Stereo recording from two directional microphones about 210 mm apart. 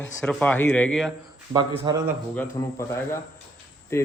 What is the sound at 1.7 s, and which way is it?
Speech, 20° right (ahead or behind).